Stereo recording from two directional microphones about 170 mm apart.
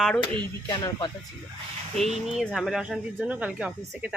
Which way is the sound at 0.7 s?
25° left (ahead or behind).